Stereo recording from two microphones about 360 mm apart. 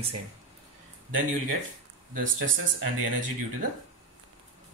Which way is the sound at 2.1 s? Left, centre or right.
Right.